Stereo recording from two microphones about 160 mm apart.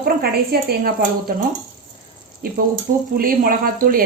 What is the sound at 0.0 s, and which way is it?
A woman's voice, 70° right (ahead or behind).